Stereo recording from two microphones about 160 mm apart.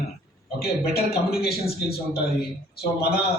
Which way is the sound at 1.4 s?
80° left.